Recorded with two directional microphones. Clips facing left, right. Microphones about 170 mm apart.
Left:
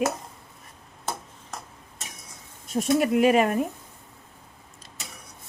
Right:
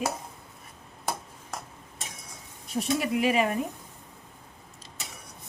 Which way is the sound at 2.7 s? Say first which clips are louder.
Left 5 dB; 50° left (ahead or behind).